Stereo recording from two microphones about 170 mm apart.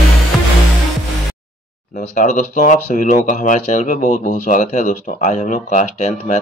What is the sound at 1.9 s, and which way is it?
Speech, 45° left (ahead or behind).